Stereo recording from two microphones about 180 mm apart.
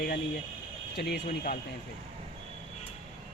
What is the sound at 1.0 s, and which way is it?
Speech, 65° left (ahead or behind).